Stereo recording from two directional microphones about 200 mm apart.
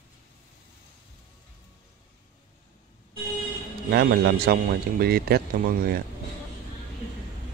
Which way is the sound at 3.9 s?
55° right (ahead or behind).